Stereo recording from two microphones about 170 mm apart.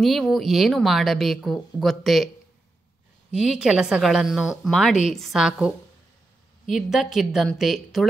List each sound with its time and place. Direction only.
0.0 s speech: centre (ahead or behind)
3.3 s speech: 5° right (ahead or behind)